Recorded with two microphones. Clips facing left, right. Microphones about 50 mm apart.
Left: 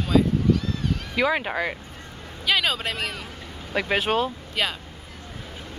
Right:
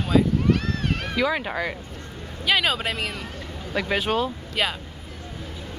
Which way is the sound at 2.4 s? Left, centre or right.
Centre.